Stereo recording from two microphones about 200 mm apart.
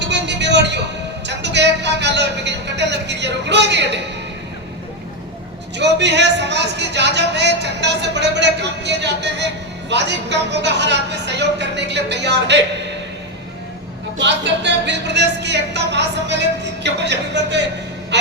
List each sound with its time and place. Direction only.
0.0 s a sound: 60° right (ahead or behind)
5.7 s a man's voice: 60° right (ahead or behind)
14.2 s a man's voice: 60° right (ahead or behind)
18.1 s gasp: 60° right (ahead or behind)